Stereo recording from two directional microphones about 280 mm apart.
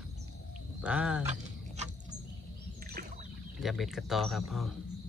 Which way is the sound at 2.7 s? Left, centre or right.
Right.